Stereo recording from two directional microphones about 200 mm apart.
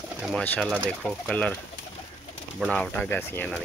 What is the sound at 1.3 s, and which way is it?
Speech, 5° left (ahead or behind).